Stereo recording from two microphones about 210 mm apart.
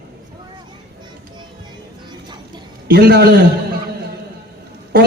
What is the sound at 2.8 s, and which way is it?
Speech, 50° right (ahead or behind).